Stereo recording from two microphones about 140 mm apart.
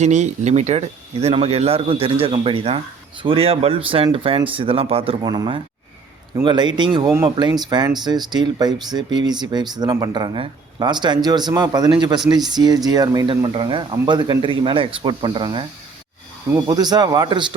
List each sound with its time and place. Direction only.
0.0 s speech: 55° right (ahead or behind)
5.2 s speech: 30° right (ahead or behind)
13.3 s speech: 40° right (ahead or behind)